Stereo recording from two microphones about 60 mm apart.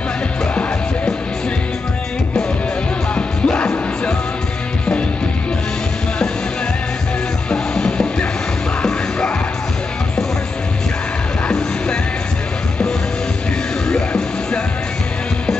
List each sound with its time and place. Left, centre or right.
3.2 s music: centre
7.4 s music: centre
13.8 s music: centre